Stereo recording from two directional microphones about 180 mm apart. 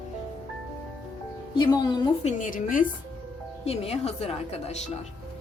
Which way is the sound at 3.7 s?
35° left (ahead or behind).